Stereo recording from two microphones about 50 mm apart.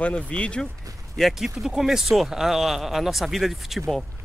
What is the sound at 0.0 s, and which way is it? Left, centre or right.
Speech, left.